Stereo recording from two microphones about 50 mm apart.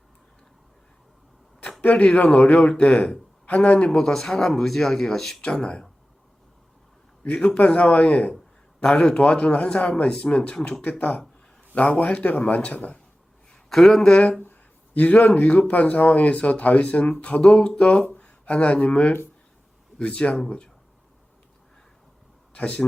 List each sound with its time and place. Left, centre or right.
1.8 s speech: left
3.8 s speech: centre
5.4 s speech: centre
7.3 s speech: left
13.7 s speech: centre
14.1 s speech: left
14.4 s a sound: left
15.4 s speech: left
17.4 s speech: centre
22.5 s speech: left